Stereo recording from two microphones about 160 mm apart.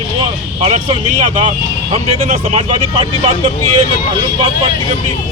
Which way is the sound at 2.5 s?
35° right (ahead or behind).